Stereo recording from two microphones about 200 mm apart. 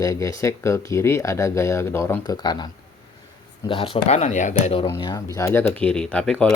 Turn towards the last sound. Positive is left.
turn(degrees=5)  # may be behind; listen again after turning